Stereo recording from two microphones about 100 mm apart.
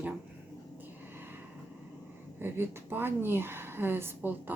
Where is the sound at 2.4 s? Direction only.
20° right (ahead or behind).